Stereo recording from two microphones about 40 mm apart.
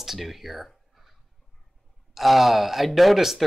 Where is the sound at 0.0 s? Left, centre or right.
Centre.